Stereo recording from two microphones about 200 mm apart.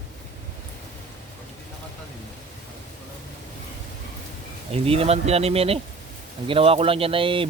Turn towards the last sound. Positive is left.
turn(degrees=-25)  # may be behind; listen again after turning